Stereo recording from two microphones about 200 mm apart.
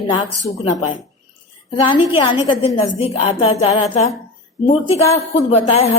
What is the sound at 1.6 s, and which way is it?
A woman's voice, 25° left (ahead or behind).